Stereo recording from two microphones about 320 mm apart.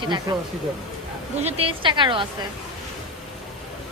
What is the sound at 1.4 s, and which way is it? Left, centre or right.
Speech, centre.